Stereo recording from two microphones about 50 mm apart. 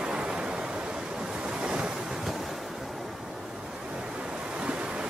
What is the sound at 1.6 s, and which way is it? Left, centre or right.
Waves, centre.